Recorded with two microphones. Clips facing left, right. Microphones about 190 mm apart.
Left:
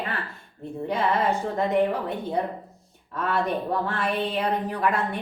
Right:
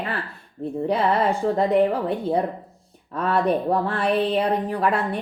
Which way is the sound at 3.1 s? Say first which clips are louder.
Right 5 dB; 35° right (ahead or behind).